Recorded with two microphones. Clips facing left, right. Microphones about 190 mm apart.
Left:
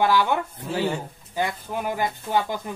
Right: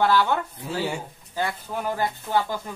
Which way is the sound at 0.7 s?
10° right (ahead or behind).